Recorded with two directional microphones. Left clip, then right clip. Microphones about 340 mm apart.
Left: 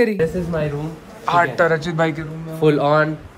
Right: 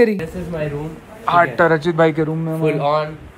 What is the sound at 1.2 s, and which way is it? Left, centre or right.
Speech, centre.